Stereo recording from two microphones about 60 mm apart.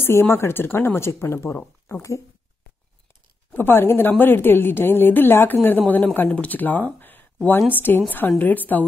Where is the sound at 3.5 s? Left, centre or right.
Left.